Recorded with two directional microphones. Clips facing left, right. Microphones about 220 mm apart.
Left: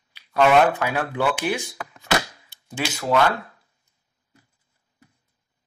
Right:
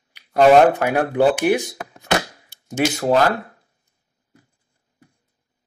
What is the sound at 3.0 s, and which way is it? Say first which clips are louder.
Speech: right 2 dB; 40° right (ahead or behind).